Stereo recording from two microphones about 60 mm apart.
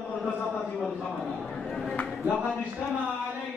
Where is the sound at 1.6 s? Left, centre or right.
Centre.